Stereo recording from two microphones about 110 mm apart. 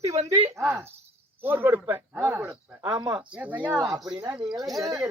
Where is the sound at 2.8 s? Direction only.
45° right (ahead or behind).